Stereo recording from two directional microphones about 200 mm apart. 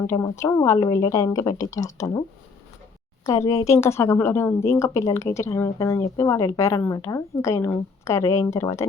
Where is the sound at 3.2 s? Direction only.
15° left (ahead or behind).